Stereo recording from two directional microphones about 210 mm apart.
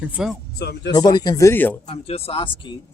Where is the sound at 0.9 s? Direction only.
20° left (ahead or behind).